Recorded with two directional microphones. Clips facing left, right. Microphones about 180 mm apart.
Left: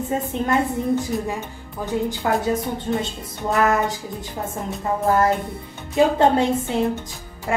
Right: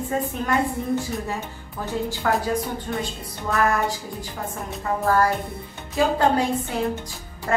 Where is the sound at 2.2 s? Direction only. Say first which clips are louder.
Left 1 dB; 20° left (ahead or behind).